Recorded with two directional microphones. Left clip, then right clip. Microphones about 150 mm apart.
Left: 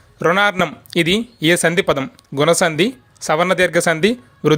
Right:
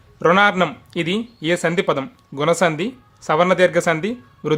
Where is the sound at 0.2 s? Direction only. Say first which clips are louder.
Even; 30° left (ahead or behind).